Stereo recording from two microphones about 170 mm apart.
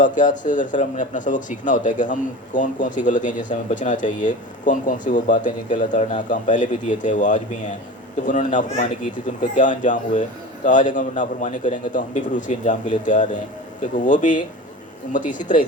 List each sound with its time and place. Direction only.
0.0 s speech: 50° left (ahead or behind)